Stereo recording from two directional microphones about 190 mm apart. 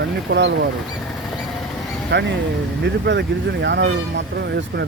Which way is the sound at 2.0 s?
65° right (ahead or behind).